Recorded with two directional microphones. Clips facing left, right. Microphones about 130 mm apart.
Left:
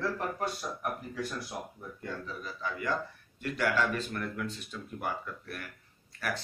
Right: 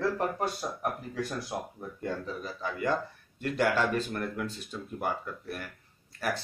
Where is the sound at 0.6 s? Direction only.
35° right (ahead or behind).